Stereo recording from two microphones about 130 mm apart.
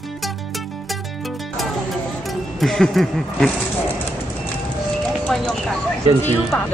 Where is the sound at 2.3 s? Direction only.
Centre (ahead or behind).